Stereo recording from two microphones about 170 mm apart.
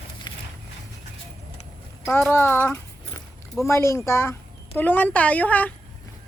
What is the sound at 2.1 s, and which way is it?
A child's voice, 10° left (ahead or behind).